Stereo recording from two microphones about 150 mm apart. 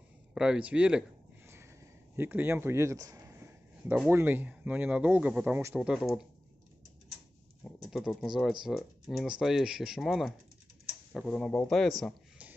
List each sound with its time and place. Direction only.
0.3 s speech: 5° right (ahead or behind)
2.1 s speech: 15° right (ahead or behind)
5.9 s speech: centre (ahead or behind)
7.9 s speech: centre (ahead or behind)